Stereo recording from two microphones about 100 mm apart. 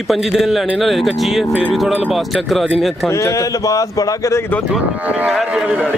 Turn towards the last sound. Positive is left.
turn(degrees=-10)  # may be behind; listen again after turning